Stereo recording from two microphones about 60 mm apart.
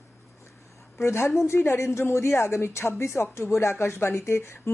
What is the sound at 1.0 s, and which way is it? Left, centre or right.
A woman's voice, left.